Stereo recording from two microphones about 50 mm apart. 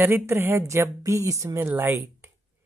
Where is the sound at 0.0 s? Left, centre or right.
Right.